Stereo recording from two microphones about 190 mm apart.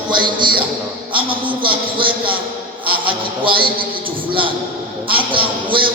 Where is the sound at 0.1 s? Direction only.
25° right (ahead or behind).